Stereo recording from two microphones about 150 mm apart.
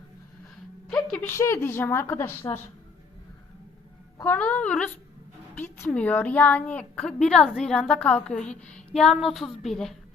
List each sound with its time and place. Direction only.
0.9 s a sound: 5° left (ahead or behind)
1.2 s a woman's voice: 20° left (ahead or behind)
4.2 s a woman's voice: 10° left (ahead or behind)